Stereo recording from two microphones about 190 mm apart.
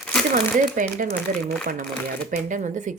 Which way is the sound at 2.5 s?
40° right (ahead or behind).